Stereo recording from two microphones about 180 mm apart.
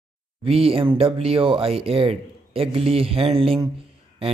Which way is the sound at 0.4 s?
30° right (ahead or behind).